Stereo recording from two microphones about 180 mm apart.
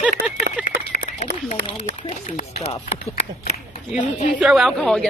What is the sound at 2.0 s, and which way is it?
Speech, 35° left (ahead or behind).